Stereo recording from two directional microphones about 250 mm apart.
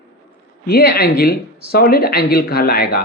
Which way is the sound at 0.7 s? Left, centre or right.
Left.